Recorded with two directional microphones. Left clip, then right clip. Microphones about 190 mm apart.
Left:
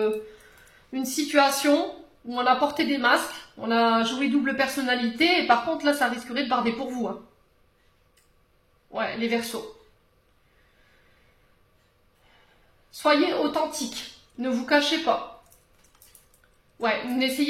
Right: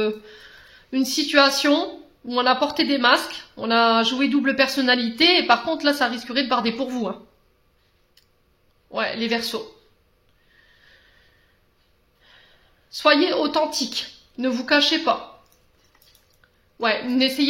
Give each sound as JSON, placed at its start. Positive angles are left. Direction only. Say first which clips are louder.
{"t": 0.9, "sound": "speech", "louder": "right 4 dB", "side_deg": -45}
{"t": 8.9, "sound": "speech", "louder": "right 3 dB", "side_deg": -45}
{"t": 12.9, "sound": "speech", "louder": "right 4 dB", "side_deg": -50}
{"t": 16.7, "sound": "speech", "louder": "right 4 dB", "side_deg": -50}